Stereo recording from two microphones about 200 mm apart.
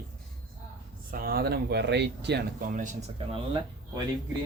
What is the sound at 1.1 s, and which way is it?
Speech, 50° right (ahead or behind).